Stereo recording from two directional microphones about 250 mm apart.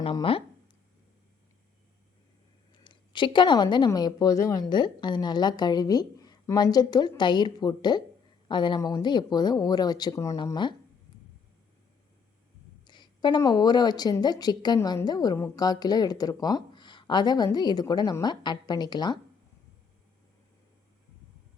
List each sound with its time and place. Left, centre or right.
0.0 s speech: left
2.7 s a woman's voice: centre
12.9 s a woman's voice: centre